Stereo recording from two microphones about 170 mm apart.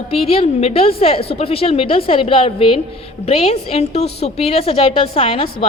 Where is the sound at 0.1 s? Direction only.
35° left (ahead or behind).